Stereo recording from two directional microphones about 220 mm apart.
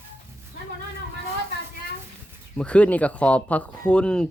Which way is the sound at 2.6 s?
5° left (ahead or behind).